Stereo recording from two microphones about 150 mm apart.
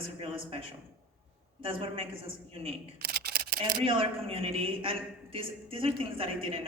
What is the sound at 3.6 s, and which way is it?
A woman's voice, 35° right (ahead or behind).